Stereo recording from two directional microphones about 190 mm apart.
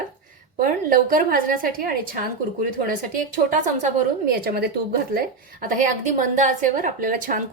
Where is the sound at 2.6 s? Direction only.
45° right (ahead or behind).